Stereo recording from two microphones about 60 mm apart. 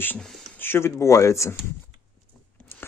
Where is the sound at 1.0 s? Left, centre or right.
Left.